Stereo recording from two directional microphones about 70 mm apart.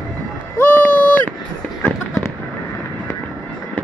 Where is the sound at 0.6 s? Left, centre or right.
Left.